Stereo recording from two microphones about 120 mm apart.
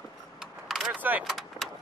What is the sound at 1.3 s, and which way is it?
Vehicle, centre (ahead or behind).